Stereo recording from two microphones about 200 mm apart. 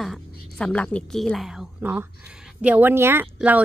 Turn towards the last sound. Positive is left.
turn(degrees=-10)  # may be behind; listen again after turning